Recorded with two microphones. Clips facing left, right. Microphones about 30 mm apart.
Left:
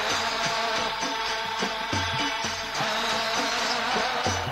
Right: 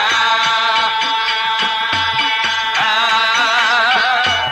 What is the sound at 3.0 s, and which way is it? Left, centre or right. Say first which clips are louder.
Music: right 13 dB; right.